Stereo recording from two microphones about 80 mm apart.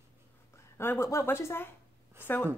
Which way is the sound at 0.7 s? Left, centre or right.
Left.